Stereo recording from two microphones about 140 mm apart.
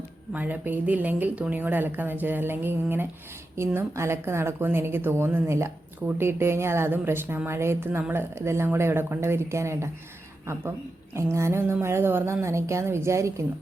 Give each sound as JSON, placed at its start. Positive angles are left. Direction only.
{"t": 0.3, "sound": "speech", "side_deg": -15}